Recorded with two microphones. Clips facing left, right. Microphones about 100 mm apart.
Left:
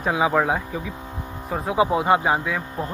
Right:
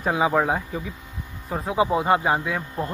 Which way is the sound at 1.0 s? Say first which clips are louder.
Left 6 dB; 60° left (ahead or behind).